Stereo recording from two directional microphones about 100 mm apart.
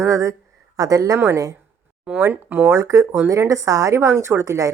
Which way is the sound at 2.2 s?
20° right (ahead or behind).